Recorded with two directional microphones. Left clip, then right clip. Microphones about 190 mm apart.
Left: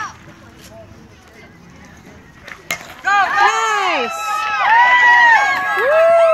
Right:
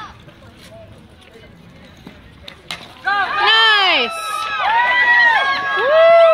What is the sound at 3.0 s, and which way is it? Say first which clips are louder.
Run: left 3 dB; 30° left (ahead or behind).